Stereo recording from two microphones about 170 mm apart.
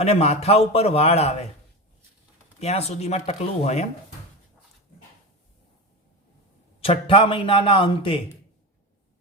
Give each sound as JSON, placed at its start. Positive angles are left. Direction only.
{"t": 0.0, "sound": "a man's voice", "side_deg": 40}
{"t": 2.6, "sound": "a man's voice", "side_deg": 40}
{"t": 6.8, "sound": "a man's voice", "side_deg": 35}